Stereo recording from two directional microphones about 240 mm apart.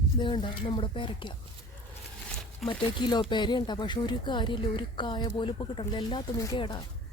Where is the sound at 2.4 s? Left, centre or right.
Centre.